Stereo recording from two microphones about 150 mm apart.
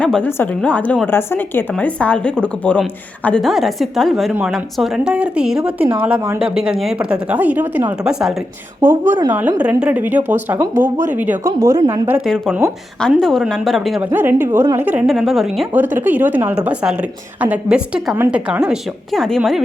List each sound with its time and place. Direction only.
0.0 s a woman's voice: 10° left (ahead or behind); by 11.5 s 10° right (ahead or behind)
11.6 s speech: 20° right (ahead or behind)
12.2 s a woman's voice: 5° left (ahead or behind)
14.1 s a woman's voice: 15° right (ahead or behind)
15.7 s a woman's voice: 15° right (ahead or behind)